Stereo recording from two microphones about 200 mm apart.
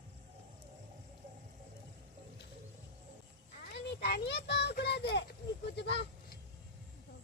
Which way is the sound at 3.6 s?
50° left (ahead or behind).